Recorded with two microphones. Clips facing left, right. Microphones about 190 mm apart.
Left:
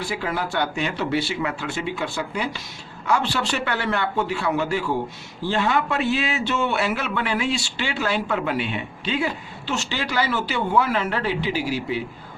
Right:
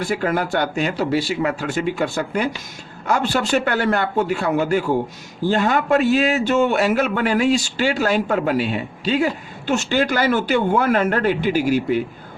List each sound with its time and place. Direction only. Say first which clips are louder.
0.0 s a man's voice: right 6 dB; 45° right (ahead or behind)